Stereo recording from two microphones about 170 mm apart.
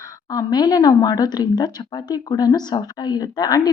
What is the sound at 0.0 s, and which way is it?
A woman's voice, 20° left (ahead or behind).